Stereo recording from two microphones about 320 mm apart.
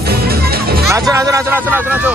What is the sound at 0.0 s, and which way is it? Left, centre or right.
Music, right.